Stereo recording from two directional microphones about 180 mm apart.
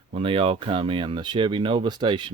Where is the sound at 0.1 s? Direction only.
30° right (ahead or behind).